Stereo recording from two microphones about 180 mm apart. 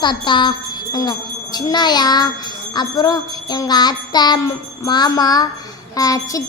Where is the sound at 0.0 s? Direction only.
25° left (ahead or behind).